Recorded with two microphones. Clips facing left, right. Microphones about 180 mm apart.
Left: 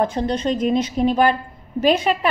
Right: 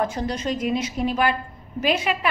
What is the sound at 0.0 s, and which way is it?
A woman's voice, 30° left (ahead or behind).